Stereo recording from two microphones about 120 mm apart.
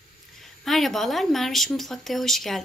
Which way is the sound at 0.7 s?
Centre (ahead or behind).